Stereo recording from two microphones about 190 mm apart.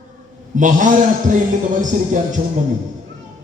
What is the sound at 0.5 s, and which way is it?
A man's voice, 40° right (ahead or behind).